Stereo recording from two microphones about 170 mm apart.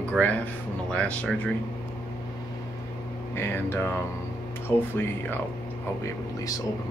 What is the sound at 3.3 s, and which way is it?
Speech, 15° left (ahead or behind).